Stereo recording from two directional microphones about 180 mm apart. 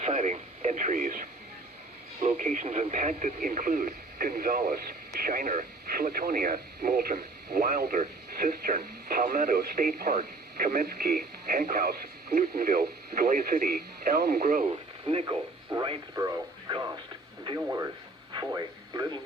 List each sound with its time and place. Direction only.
0.0 s speech: 40° right (ahead or behind); by 14.6 s 55° right (ahead or behind)
15.0 s a man's voice: 30° right (ahead or behind)